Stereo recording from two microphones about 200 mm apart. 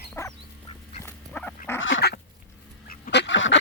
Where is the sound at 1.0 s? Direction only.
5° left (ahead or behind).